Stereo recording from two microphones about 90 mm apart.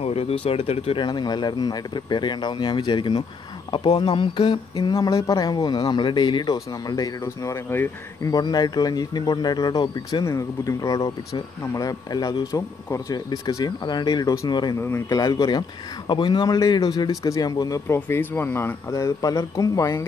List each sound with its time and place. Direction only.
0.2 s speech: 90° left
1.0 s speech: 55° left (ahead or behind)
4.9 s a man's voice: 40° left (ahead or behind)
7.5 s speech: 25° left (ahead or behind)
8.3 s a man's voice: 50° left (ahead or behind)
10.2 s speech: 35° left (ahead or behind)
13.7 s a man's voice: 55° left (ahead or behind)
14.8 s speech: 30° left (ahead or behind); by 15.6 s 50° left (ahead or behind)
16.1 s speech: 60° left (ahead or behind)
16.5 s a man's voice: 40° left (ahead or behind)
17.8 s speech: 25° left (ahead or behind)
18.9 s speech: 40° left (ahead or behind)